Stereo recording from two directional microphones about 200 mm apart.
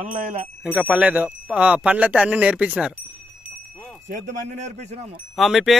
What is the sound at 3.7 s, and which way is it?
Wind chime, 5° left (ahead or behind).